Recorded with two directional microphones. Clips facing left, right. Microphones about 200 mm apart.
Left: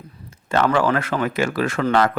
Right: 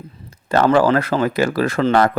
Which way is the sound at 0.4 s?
35° right (ahead or behind).